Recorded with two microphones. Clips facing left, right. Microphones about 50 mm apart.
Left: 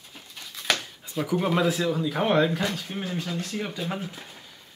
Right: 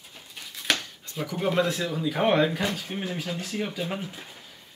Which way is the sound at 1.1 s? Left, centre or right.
Centre.